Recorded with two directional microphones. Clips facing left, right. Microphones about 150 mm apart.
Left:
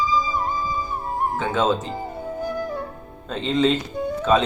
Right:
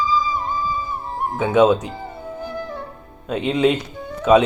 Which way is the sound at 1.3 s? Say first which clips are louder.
Right 8 dB; 15° right (ahead or behind).